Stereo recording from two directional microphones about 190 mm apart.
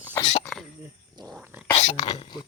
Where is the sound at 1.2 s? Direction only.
Centre (ahead or behind).